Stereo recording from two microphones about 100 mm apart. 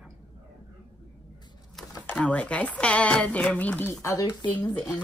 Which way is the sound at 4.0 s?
35° left (ahead or behind).